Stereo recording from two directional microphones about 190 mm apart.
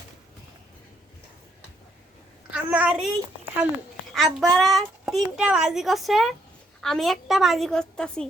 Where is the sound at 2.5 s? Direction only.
5° right (ahead or behind).